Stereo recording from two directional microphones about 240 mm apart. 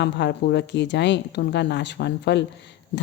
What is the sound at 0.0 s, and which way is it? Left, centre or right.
Speech, left.